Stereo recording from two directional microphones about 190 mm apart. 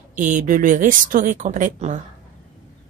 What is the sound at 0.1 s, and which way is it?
A woman's voice, 40° right (ahead or behind).